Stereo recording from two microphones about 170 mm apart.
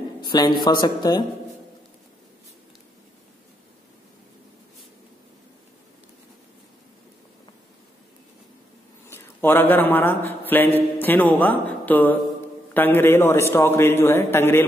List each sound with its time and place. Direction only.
0.2 s speech: 25° left (ahead or behind)
9.1 s a man's voice: 10° left (ahead or behind)